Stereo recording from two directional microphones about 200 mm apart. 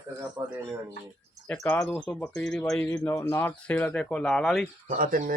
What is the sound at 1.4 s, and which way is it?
Speech, 5° left (ahead or behind).